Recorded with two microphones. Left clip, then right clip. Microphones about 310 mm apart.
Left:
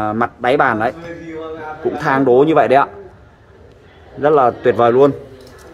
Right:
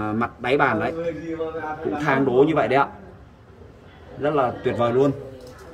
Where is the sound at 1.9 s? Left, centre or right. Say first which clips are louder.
Left 6 dB; centre.